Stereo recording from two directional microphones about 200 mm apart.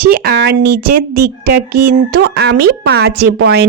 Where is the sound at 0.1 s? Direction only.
50° right (ahead or behind).